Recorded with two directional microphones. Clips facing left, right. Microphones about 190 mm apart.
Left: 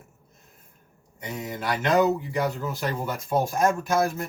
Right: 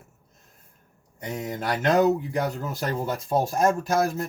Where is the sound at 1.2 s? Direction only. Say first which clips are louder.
Right 2 dB; 40° right (ahead or behind).